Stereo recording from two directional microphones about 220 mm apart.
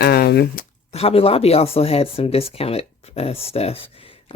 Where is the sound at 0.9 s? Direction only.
25° left (ahead or behind).